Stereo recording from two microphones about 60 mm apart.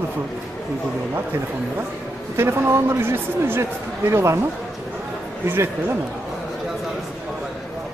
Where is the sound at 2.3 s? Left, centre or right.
Right.